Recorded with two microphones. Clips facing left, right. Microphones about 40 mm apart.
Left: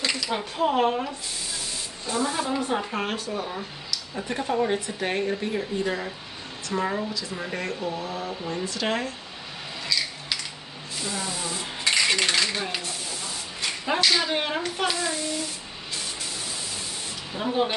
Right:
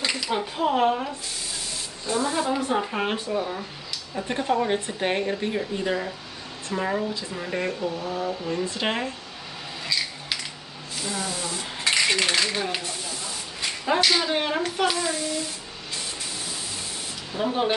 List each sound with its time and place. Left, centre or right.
0.0 s speech: centre
3.1 s speech: centre
4.7 s a woman's voice: right
5.0 s speech: centre
8.0 s speech: right
11.0 s speech: centre
17.3 s speech: centre